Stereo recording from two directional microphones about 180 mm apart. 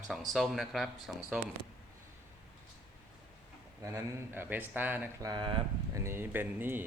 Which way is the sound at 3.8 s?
15° right (ahead or behind).